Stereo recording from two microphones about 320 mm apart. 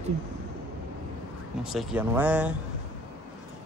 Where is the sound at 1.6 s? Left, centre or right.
Centre.